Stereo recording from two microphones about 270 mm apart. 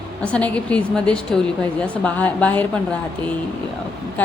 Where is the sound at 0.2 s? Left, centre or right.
Centre.